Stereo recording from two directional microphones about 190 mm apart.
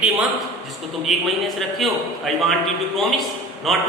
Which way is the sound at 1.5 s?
Centre (ahead or behind).